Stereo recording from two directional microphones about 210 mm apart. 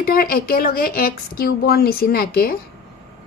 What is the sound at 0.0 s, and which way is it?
A woman's voice, 45° left (ahead or behind).